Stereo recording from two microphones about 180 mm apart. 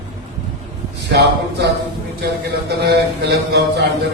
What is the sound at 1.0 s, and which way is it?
A man's voice, 70° right (ahead or behind).